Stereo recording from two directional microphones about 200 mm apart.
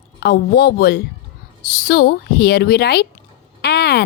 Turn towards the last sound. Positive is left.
turn(degrees=55)  # may be behind; listen again after turning